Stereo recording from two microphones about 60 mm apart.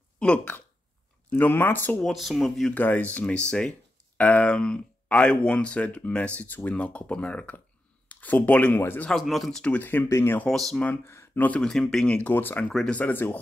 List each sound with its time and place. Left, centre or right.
0.2 s speech: centre
1.3 s speech: left
2.0 s speech: centre
2.7 s speech: left
3.3 s speech: centre
4.2 s speech: left
6.7 s speech: centre; by 9.0 s left
9.2 s speech: centre
9.8 s speech: left
10.0 s speech: left
10.5 s speech: centre
11.3 s speech: left
11.6 s speech: centre
12.1 s speech: left